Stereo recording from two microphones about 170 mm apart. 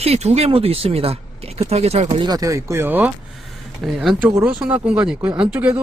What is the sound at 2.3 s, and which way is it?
Speech, 20° right (ahead or behind).